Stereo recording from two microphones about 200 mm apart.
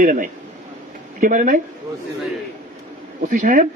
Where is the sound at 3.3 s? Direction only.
40° right (ahead or behind).